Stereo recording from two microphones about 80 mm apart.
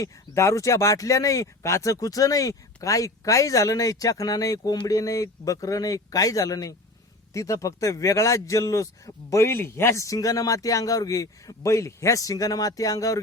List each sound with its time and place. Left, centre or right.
0.0 s speech: left